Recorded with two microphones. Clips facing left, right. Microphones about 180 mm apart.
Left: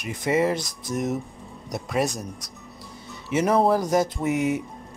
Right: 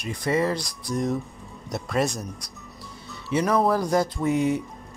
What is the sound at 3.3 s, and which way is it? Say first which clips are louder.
Speech: left 2 dB; 20° left (ahead or behind).